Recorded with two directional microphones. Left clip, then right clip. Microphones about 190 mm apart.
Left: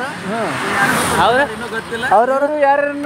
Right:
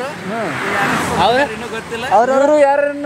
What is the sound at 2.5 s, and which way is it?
Speech, 35° right (ahead or behind).